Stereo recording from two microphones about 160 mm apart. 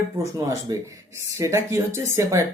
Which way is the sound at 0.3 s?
20° right (ahead or behind).